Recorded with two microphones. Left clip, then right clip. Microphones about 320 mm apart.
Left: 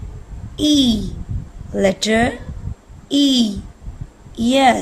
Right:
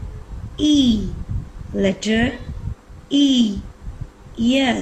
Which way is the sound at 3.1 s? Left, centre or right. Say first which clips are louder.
Left 1 dB; centre.